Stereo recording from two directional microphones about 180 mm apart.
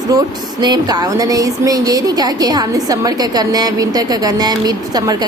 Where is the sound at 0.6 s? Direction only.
20° right (ahead or behind).